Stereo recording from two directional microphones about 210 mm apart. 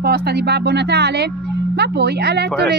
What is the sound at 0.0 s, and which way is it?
A woman's voice, 50° right (ahead or behind).